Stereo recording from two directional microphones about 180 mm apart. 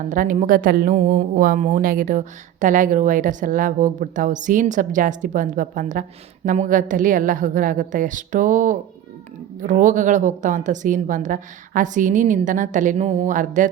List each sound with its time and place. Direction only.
0.1 s a woman's voice: 45° right (ahead or behind)